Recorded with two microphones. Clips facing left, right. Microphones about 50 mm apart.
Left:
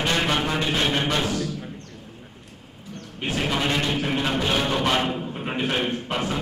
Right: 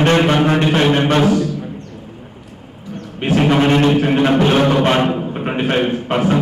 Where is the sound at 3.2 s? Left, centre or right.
Right.